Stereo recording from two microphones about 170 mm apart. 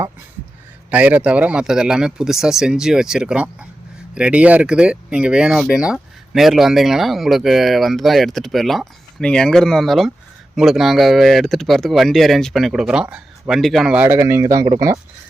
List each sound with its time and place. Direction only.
0.9 s speech: 10° right (ahead or behind)